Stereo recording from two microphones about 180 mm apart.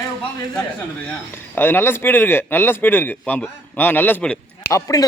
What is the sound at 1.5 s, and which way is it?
A man's voice, 10° left (ahead or behind).